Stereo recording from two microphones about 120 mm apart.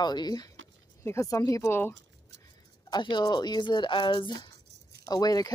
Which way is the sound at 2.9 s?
40° left (ahead or behind).